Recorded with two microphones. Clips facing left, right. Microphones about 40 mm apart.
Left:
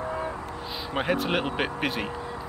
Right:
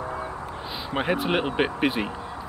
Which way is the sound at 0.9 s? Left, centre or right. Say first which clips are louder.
Right 2 dB; centre.